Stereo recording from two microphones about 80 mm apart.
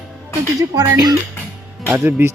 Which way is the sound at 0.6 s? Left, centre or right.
Right.